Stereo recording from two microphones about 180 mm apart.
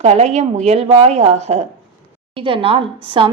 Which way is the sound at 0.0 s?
40° right (ahead or behind).